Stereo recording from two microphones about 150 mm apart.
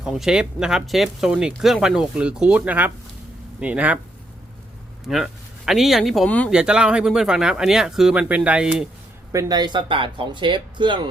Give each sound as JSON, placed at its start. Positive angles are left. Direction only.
{"t": 0.0, "sound": "speech", "side_deg": -5}
{"t": 5.0, "sound": "speech", "side_deg": -5}
{"t": 6.5, "sound": "speech", "side_deg": -5}
{"t": 9.3, "sound": "speech", "side_deg": -25}